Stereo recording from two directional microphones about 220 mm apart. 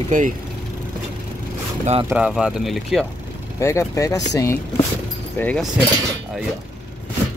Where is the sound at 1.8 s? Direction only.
25° right (ahead or behind).